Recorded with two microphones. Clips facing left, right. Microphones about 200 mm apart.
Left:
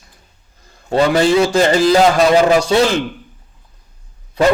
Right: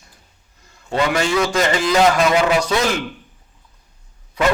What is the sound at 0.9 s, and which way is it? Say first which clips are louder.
A man's voice: left 6 dB; 35° left (ahead or behind).